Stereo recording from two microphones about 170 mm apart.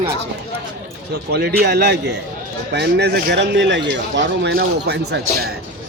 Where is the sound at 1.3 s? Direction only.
70° right (ahead or behind).